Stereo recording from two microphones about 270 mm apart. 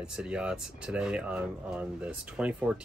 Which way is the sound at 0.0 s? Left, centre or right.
Centre.